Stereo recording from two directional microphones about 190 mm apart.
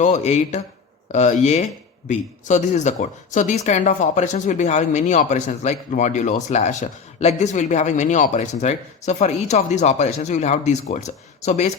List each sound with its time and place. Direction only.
0.0 s speech: 35° left (ahead or behind)